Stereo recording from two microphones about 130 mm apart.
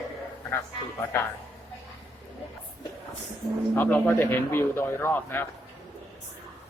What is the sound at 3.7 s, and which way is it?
A man's voice, 15° left (ahead or behind).